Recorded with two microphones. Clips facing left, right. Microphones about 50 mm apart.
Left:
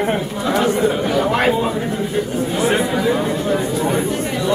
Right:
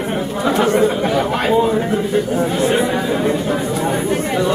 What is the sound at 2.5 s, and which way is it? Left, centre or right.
Speech, centre.